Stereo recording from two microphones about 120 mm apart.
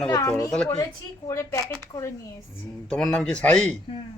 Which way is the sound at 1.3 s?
25° left (ahead or behind).